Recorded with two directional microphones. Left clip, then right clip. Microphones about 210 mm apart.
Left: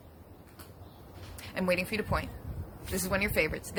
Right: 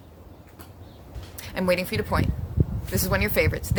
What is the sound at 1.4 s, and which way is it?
Speech, 20° right (ahead or behind).